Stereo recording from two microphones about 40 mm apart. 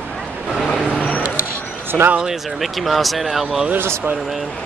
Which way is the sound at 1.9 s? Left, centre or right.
Centre.